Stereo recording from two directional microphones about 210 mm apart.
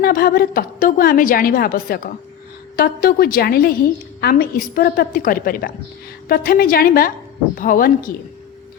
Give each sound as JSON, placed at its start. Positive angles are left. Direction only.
{"t": 0.0, "sound": "a woman's voice", "side_deg": 45}